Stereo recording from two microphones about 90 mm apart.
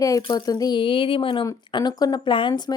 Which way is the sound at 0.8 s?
70° left (ahead or behind).